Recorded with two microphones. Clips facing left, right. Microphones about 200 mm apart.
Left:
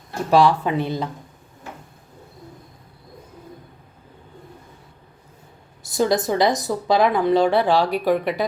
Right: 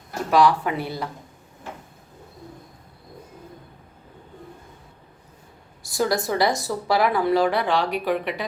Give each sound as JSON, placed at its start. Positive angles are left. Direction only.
{"t": 0.3, "sound": "a woman's voice", "side_deg": 30}
{"t": 5.8, "sound": "a woman's voice", "side_deg": 25}